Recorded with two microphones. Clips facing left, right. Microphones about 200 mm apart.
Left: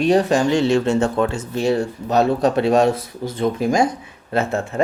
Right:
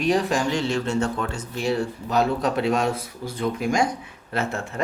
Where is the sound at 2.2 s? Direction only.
25° left (ahead or behind).